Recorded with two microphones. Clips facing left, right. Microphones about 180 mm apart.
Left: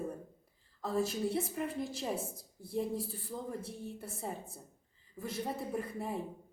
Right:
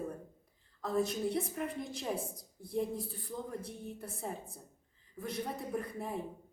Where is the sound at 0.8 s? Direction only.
Centre (ahead or behind).